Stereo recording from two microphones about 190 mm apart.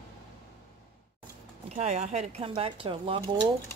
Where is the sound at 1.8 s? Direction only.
35° right (ahead or behind).